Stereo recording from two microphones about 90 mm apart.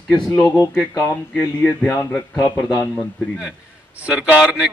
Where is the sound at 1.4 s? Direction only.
30° left (ahead or behind).